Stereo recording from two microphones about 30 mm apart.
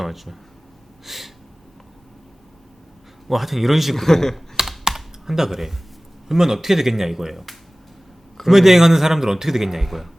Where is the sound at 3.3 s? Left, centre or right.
Centre.